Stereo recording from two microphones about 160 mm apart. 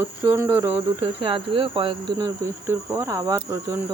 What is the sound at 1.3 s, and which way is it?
Speech, 30° right (ahead or behind).